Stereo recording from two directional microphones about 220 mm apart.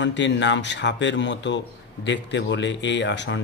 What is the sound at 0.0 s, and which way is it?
Speech, 55° left (ahead or behind).